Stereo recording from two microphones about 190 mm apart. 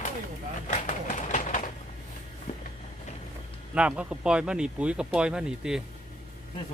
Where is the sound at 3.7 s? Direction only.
5° right (ahead or behind).